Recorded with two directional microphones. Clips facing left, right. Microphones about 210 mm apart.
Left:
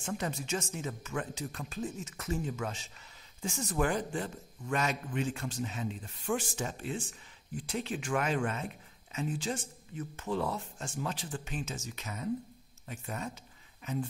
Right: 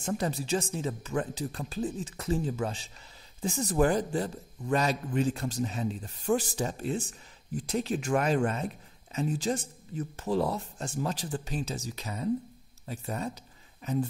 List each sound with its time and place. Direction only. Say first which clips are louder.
0.0 s speech: right 5 dB; 35° right (ahead or behind)